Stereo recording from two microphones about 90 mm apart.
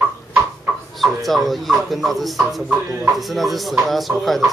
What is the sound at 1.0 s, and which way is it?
Speech, centre (ahead or behind).